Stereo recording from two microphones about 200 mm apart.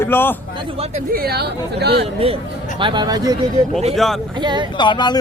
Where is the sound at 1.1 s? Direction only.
50° right (ahead or behind).